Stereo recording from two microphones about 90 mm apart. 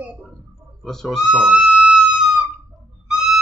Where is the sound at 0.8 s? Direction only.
5° left (ahead or behind).